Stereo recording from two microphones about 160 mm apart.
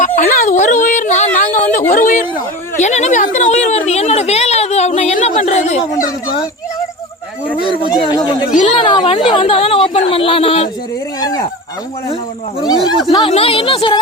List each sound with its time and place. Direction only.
0.2 s a sound: 55° left (ahead or behind)
1.7 s a woman's voice: 55° left (ahead or behind)
7.8 s speech: 30° left (ahead or behind)
12.6 s snake: 25° left (ahead or behind)
13.1 s speech: 35° left (ahead or behind)